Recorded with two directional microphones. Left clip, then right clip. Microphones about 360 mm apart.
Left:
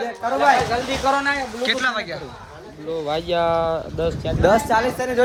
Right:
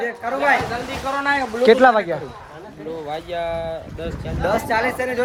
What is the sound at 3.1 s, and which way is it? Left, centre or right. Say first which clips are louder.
Speech: left 6 dB; left.